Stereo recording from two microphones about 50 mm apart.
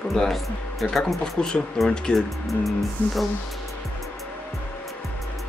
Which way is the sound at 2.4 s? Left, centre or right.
Centre.